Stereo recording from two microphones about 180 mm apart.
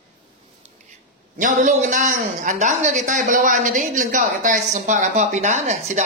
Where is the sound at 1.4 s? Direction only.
45° right (ahead or behind).